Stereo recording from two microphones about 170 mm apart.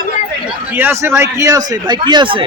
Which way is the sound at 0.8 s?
10° right (ahead or behind).